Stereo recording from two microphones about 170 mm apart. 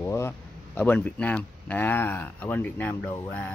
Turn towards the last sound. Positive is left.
turn(degrees=10)  # may be behind; listen again after turning